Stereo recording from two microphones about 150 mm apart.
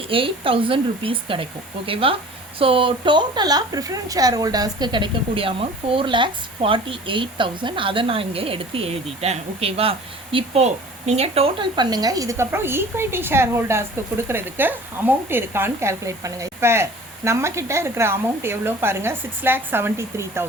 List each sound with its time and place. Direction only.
0.1 s a woman's voice: 35° right (ahead or behind); by 20.5 s 20° right (ahead or behind)